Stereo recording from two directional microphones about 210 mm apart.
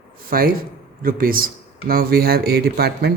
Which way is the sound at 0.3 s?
45° right (ahead or behind).